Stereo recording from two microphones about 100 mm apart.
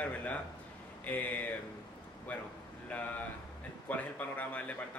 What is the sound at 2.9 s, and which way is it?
Speech, 15° left (ahead or behind).